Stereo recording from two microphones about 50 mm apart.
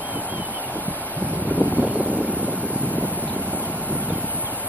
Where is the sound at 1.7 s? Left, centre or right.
Right.